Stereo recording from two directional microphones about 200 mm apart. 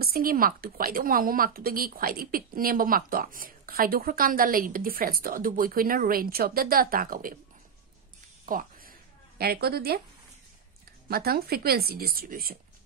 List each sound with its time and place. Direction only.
0.0 s a woman's voice: 45° right (ahead or behind)
8.5 s a sound: 45° right (ahead or behind)
9.4 s a woman's voice: 50° right (ahead or behind)
11.1 s a woman's voice: 50° right (ahead or behind)